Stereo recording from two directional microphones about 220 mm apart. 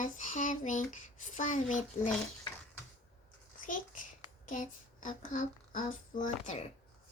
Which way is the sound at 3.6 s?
35° left (ahead or behind).